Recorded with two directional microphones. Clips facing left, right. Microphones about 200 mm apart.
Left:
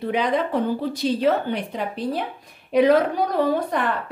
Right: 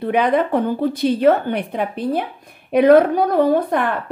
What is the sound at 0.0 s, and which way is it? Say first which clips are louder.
A woman's voice: right 5 dB; 55° right (ahead or behind).